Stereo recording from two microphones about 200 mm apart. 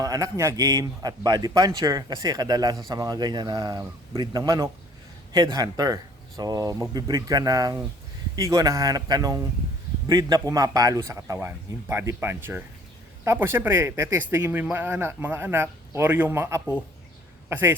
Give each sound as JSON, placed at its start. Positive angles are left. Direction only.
{"t": 0.0, "sound": "a man's voice", "side_deg": -15}